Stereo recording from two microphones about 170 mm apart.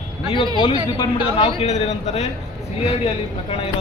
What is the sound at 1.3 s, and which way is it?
A man's voice, 35° left (ahead or behind).